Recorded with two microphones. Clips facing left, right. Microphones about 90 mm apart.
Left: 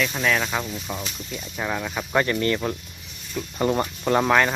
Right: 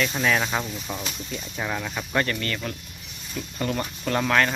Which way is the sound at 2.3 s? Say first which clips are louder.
Left 7 dB; 25° left (ahead or behind).